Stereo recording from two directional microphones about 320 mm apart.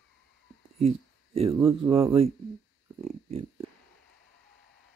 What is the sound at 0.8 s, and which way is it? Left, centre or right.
Speech, centre.